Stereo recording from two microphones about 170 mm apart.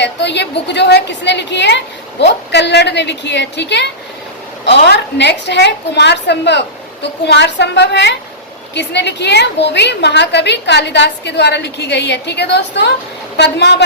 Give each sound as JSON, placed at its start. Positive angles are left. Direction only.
{"t": 0.0, "sound": "a woman's voice", "side_deg": 90}
{"t": 13.3, "sound": "a woman's voice", "side_deg": 80}